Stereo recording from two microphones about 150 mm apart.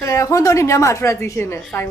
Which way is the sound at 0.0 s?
20° left (ahead or behind).